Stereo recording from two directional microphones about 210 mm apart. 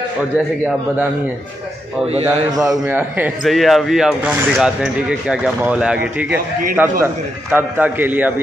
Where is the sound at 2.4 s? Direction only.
15° right (ahead or behind).